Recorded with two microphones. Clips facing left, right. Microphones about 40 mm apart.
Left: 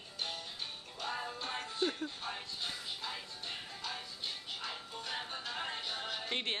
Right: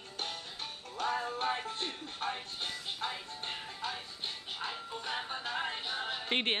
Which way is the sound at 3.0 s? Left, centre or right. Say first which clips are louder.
Right 6 dB; right.